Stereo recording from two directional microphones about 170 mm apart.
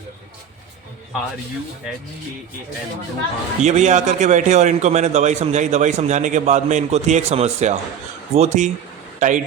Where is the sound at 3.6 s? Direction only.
45° right (ahead or behind).